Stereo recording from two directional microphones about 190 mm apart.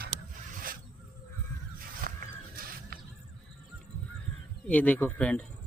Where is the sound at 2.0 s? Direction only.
50° right (ahead or behind).